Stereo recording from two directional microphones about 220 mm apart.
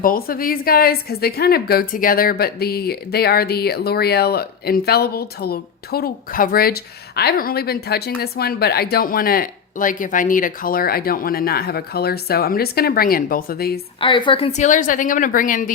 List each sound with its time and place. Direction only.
0.0 s a woman's voice: 40° left (ahead or behind)
14.0 s a woman's voice: 20° left (ahead or behind); by 15.7 s 35° left (ahead or behind)